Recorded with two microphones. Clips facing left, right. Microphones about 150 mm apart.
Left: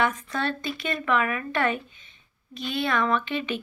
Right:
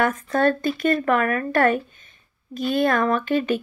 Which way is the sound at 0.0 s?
50° right (ahead or behind).